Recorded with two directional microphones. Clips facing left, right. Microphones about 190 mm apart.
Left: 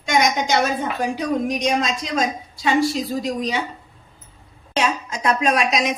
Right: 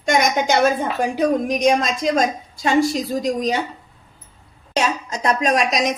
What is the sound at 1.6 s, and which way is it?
A woman's voice, 50° right (ahead or behind).